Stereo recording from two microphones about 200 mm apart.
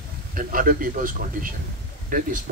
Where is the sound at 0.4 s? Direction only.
45° right (ahead or behind).